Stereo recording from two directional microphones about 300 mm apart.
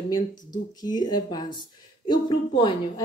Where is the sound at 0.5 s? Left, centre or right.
Centre.